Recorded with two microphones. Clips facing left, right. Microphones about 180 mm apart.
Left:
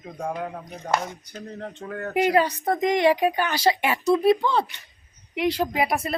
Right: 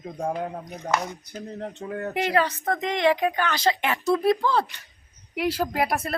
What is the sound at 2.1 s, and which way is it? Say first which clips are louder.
Speech: left 4 dB; 10° left (ahead or behind).